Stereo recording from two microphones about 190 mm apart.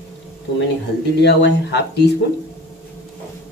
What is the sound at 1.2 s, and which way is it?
Speech, 65° left (ahead or behind).